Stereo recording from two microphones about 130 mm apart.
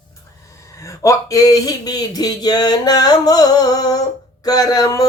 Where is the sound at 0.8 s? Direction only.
25° left (ahead or behind).